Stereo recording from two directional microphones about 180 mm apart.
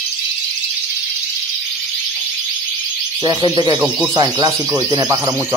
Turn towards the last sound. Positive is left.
turn(degrees=-15)  # may be behind; listen again after turning